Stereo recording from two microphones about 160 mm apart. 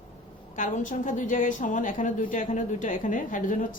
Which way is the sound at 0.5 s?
55° left (ahead or behind).